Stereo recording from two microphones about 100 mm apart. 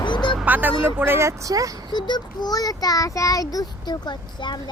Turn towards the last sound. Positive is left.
turn(degrees=50)  # may be behind; listen again after turning